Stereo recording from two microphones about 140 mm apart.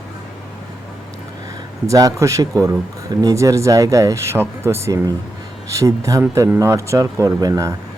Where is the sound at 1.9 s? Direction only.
25° right (ahead or behind).